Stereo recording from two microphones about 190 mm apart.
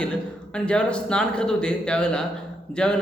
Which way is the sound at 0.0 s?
5° left (ahead or behind).